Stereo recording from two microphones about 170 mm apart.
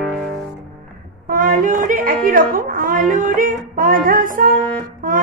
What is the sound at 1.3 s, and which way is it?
Music, 55° right (ahead or behind).